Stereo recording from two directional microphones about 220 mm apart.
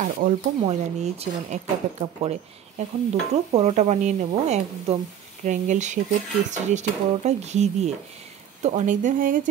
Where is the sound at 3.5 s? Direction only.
30° right (ahead or behind).